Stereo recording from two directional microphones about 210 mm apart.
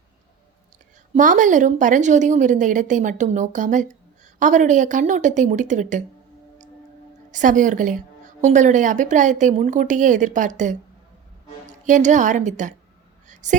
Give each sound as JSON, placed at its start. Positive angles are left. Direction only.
{"t": 1.1, "sound": "a woman's voice", "side_deg": -35}
{"t": 7.3, "sound": "a woman's voice", "side_deg": -35}
{"t": 13.2, "sound": "a sound", "side_deg": -35}